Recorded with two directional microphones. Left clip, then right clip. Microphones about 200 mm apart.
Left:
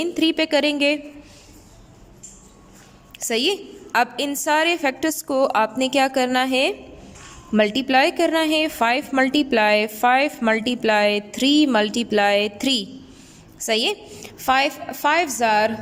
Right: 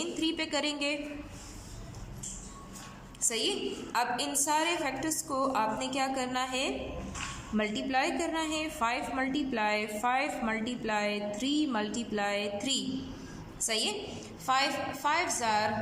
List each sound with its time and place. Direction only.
0.0 s speech: 40° left (ahead or behind)
3.2 s a woman's voice: 45° left (ahead or behind)